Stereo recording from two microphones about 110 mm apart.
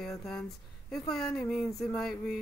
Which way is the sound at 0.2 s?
5° left (ahead or behind).